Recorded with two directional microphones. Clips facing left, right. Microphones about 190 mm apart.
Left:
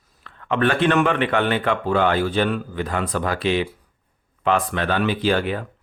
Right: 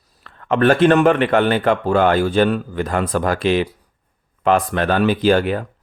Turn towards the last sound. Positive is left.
turn(degrees=-45)  # may be behind; listen again after turning